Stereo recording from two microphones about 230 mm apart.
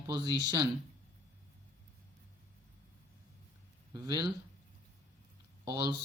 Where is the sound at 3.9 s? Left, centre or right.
Centre.